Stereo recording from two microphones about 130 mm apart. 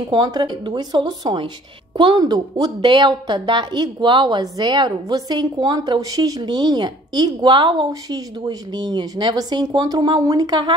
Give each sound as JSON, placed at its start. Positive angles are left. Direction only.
{"t": 0.1, "sound": "a woman's voice", "side_deg": -35}